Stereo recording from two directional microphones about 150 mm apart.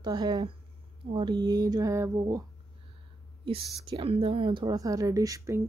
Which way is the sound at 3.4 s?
35° right (ahead or behind).